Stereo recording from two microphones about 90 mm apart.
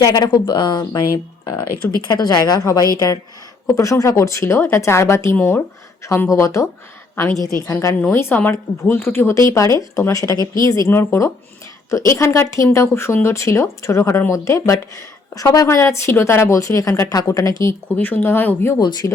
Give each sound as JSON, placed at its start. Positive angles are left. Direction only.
{"t": 0.0, "sound": "speech", "side_deg": 50}
{"t": 2.0, "sound": "a woman's voice", "side_deg": 50}
{"t": 8.1, "sound": "a woman's voice", "side_deg": 25}
{"t": 10.9, "sound": "a woman's voice", "side_deg": 30}
{"t": 17.9, "sound": "speech", "side_deg": 20}
{"t": 18.8, "sound": "speech", "side_deg": 55}